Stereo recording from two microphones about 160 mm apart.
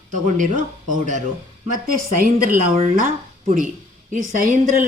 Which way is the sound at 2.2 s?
60° right (ahead or behind).